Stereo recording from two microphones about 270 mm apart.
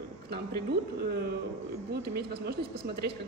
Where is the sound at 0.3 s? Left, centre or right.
Right.